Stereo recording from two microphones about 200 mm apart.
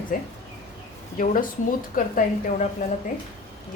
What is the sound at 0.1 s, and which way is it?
A woman's voice, 45° left (ahead or behind).